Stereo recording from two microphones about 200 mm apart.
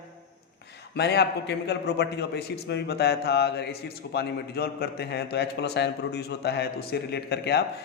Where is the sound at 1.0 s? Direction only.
55° left (ahead or behind).